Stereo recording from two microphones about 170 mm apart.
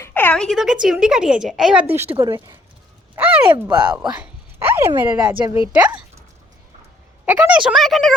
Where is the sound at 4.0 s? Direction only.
5° right (ahead or behind).